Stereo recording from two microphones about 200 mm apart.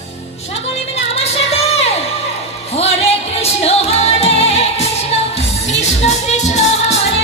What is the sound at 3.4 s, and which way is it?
Music, 30° left (ahead or behind).